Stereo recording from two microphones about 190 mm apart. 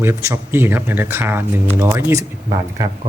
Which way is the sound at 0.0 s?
15° right (ahead or behind).